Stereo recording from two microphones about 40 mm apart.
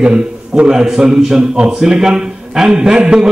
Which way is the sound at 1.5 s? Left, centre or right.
Right.